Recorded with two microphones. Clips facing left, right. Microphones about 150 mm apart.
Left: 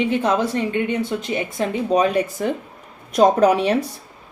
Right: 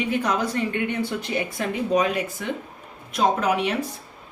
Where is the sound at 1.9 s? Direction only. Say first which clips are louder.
Left 4 dB; 35° left (ahead or behind).